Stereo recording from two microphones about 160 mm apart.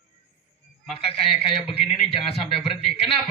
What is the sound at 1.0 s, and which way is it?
A man's voice, 35° left (ahead or behind).